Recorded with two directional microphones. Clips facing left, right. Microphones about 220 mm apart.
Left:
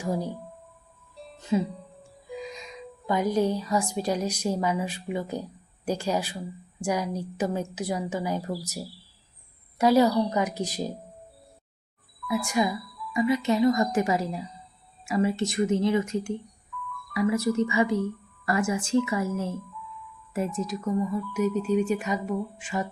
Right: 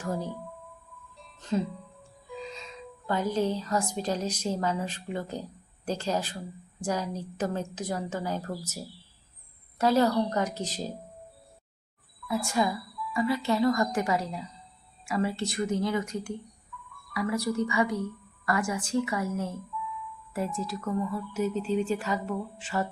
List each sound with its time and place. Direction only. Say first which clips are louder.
0.0 s speech: left 3 dB; 10° left (ahead or behind)
1.4 s music: left 3 dB; 10° left (ahead or behind)
2.3 s a woman's voice: left 3 dB; 15° left (ahead or behind)
12.5 s speech: left 1 dB; 15° left (ahead or behind)